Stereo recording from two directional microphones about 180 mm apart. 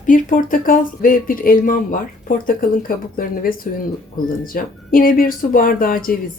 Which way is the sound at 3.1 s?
50° left (ahead or behind).